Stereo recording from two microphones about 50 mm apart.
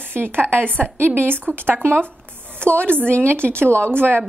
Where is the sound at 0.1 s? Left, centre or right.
Right.